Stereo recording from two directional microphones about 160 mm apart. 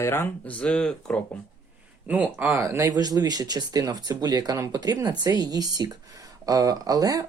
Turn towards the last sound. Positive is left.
turn(degrees=-25)  # may be behind; listen again after turning